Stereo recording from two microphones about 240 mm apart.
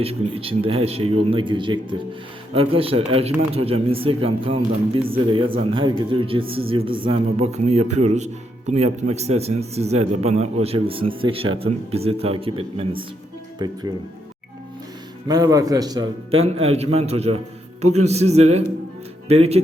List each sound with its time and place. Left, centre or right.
0.0 s speech: right
15.3 s speech: centre